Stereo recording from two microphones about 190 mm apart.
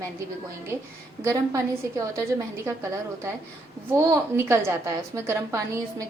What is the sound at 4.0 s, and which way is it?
A woman's voice, 15° right (ahead or behind).